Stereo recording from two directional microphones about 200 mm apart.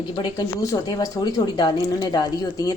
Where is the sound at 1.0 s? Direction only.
20° left (ahead or behind).